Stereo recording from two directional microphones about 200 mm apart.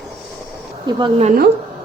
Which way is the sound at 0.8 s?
25° right (ahead or behind).